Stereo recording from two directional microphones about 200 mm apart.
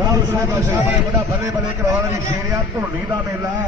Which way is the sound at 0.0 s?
20° right (ahead or behind).